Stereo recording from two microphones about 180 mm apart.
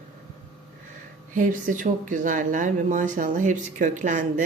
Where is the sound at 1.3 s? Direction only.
45° right (ahead or behind).